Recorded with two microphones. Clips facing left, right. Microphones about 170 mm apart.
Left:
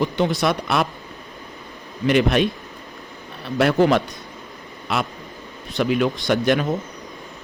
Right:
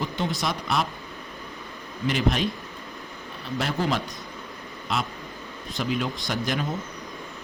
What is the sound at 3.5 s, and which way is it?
Speech, 65° left (ahead or behind).